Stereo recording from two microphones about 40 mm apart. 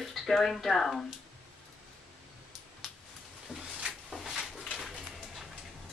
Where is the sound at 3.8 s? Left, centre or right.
Centre.